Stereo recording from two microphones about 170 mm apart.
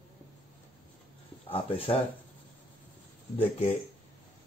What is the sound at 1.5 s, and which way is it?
Speech, 30° left (ahead or behind).